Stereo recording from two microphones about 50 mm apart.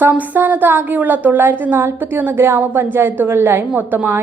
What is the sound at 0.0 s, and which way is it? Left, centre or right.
A woman's voice, right.